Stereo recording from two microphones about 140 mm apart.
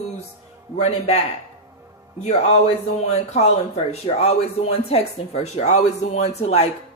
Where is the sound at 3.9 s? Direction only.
45° left (ahead or behind).